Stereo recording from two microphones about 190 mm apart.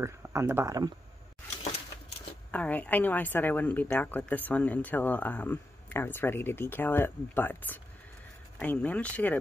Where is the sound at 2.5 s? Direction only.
5° left (ahead or behind).